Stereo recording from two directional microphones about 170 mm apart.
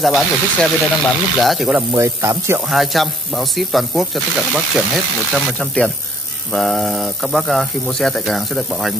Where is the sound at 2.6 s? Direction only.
Centre (ahead or behind).